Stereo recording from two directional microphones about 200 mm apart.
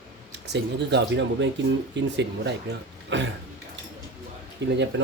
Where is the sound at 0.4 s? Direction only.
60° right (ahead or behind).